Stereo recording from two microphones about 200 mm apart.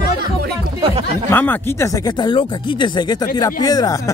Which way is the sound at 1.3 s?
10° left (ahead or behind).